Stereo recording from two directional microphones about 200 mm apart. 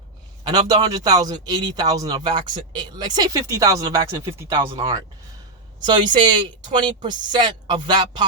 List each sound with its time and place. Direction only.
0.4 s speech: 20° right (ahead or behind)